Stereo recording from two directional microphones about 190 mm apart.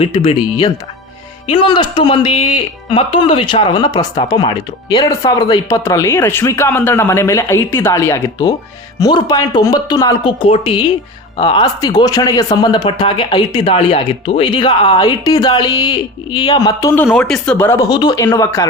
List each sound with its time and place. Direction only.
0.0 s speech: 30° left (ahead or behind)
17.1 s speech: centre (ahead or behind); by 18.7 s 20° left (ahead or behind)